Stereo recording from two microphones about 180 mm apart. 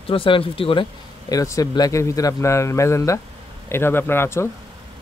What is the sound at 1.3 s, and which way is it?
A man's voice, 20° left (ahead or behind).